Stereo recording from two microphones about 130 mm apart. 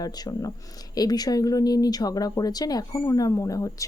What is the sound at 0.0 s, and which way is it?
A woman's voice, 30° left (ahead or behind).